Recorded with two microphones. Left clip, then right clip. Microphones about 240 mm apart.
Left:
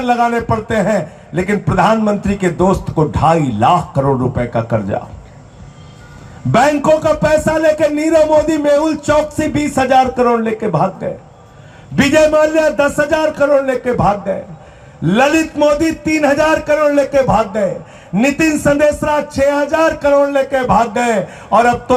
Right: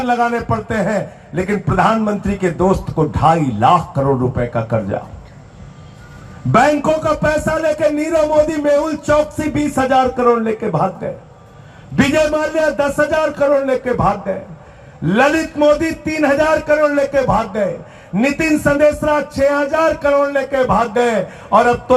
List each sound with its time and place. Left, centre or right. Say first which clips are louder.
0.0 s a man's voice: left 2 dB; left
6.5 s a man's voice: left 2 dB; left
11.9 s a man's voice: left 5 dB; left